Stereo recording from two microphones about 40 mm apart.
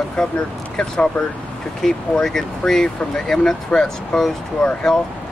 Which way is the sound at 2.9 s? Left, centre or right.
Centre.